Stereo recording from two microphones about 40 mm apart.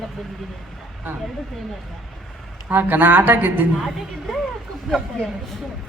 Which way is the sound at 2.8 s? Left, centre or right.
Right.